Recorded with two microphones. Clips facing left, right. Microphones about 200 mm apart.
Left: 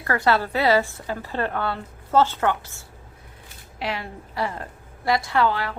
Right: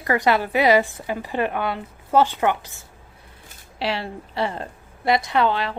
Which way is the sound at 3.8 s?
30° right (ahead or behind).